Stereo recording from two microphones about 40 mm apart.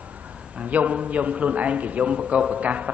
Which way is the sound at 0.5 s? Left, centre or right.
Right.